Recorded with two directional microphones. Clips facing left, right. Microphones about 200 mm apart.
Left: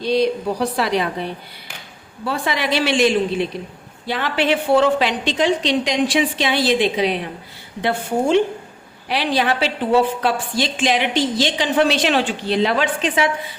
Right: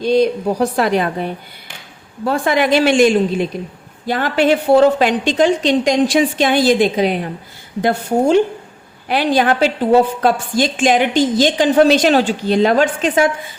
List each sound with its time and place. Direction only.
0.0 s a woman's voice: 45° right (ahead or behind)